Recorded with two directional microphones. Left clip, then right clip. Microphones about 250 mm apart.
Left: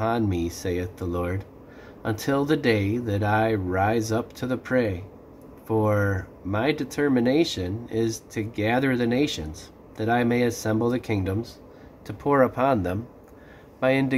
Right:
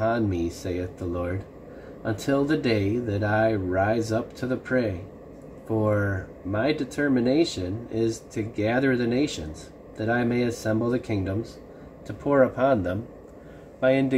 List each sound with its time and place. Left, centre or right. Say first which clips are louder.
0.0 s speech: even; centre
12.3 s speech: even; centre